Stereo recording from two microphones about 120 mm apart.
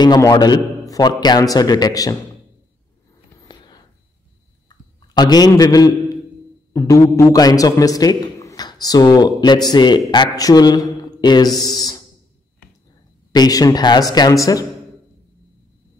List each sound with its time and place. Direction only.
0.0 s a man's voice: 35° left (ahead or behind)
3.4 s a sound: 35° left (ahead or behind)
6.7 s a man's voice: 25° left (ahead or behind)
13.3 s a man's voice: 35° left (ahead or behind)